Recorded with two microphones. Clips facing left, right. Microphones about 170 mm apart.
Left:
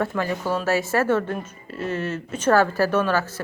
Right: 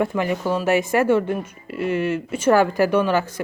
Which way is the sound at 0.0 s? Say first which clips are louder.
Right 3 dB; 15° right (ahead or behind).